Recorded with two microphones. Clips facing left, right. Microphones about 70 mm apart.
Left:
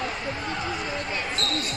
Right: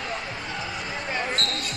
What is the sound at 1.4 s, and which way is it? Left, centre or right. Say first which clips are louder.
Basketball bounce: even; right.